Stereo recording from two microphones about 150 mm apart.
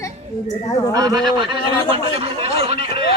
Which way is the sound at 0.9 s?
25° right (ahead or behind).